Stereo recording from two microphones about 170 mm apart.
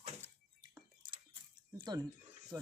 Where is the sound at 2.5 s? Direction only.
20° right (ahead or behind).